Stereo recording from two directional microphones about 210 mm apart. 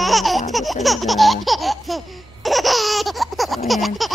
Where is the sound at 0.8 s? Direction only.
Centre (ahead or behind).